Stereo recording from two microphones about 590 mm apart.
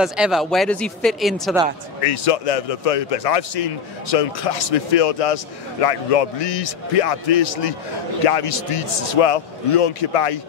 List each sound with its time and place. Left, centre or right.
0.0 s speech: centre
2.0 s a man's voice: left